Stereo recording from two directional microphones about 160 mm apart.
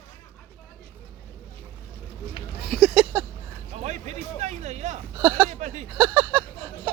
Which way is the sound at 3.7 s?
45° right (ahead or behind).